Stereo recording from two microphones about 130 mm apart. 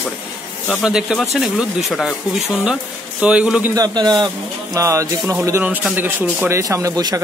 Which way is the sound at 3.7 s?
30° right (ahead or behind).